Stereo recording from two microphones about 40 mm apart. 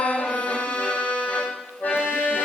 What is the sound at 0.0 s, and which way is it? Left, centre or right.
Music, left.